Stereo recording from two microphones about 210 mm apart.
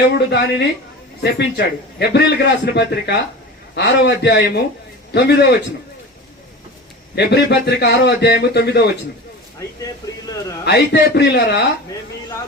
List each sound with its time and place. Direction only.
0.1 s a man's voice: 55° left (ahead or behind)
7.2 s a man's voice: 50° left (ahead or behind)
10.7 s a man's voice: 50° left (ahead or behind)